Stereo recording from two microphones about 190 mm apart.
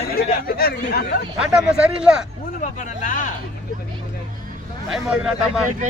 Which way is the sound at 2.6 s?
45° left (ahead or behind).